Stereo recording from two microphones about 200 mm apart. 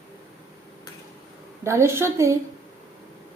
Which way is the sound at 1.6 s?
15° right (ahead or behind).